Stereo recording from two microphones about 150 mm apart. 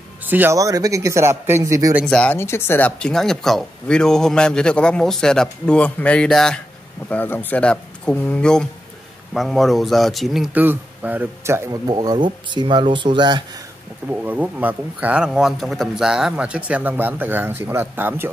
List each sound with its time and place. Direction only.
0.2 s speech: 15° right (ahead or behind)
2.0 s speech: 10° left (ahead or behind); by 13.4 s 30° right (ahead or behind)
14.2 s speech: 10° right (ahead or behind)